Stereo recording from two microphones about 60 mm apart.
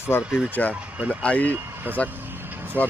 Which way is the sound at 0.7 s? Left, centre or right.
Right.